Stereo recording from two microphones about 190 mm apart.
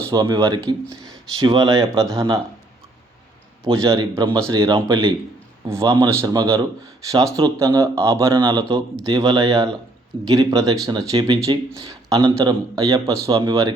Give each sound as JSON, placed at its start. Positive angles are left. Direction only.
{"t": 0.0, "sound": "a man's voice", "side_deg": -20}
{"t": 3.6, "sound": "a man's voice", "side_deg": -15}